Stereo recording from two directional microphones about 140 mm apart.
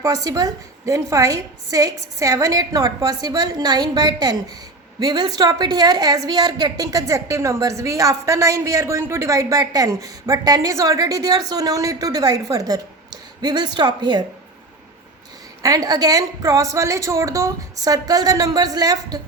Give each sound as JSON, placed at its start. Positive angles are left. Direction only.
{"t": 0.0, "sound": "a woman's voice", "side_deg": -25}
{"t": 15.6, "sound": "a woman's voice", "side_deg": -25}